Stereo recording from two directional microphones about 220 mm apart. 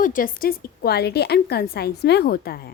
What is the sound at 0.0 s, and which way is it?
A woman's voice, 40° left (ahead or behind).